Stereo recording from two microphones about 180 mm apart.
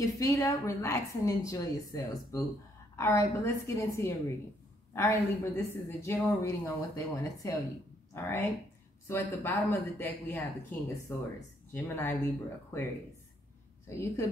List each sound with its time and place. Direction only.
0.0 s a woman's voice: 20° left (ahead or behind)
13.8 s a woman's voice: 15° left (ahead or behind)